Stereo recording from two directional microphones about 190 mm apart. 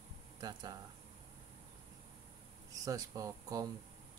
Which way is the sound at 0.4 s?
20° right (ahead or behind).